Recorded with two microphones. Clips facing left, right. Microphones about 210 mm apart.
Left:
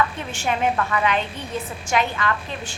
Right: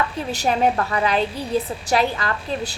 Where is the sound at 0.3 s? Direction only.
35° right (ahead or behind).